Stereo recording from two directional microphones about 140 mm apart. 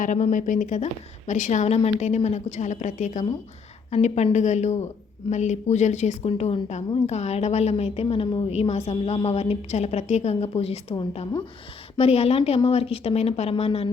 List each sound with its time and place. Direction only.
0.0 s a woman's voice: 65° left (ahead or behind); by 8.5 s 35° left (ahead or behind)
8.5 s a woman's voice: 50° left (ahead or behind)
11.9 s a woman's voice: 45° left (ahead or behind)